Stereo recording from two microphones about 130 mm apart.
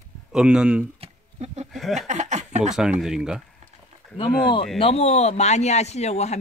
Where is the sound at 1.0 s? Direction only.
55° right (ahead or behind).